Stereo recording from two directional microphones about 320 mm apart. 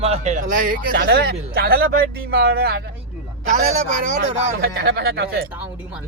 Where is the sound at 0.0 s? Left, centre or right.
Centre.